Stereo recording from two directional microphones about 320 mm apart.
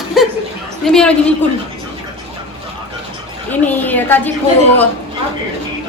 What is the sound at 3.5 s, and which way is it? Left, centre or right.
Speech, centre.